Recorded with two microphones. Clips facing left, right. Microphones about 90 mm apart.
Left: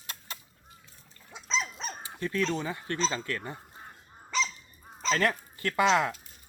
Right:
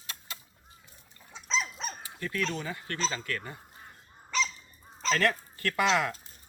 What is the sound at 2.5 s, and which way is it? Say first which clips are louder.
Speech: left 4 dB; 25° left (ahead or behind).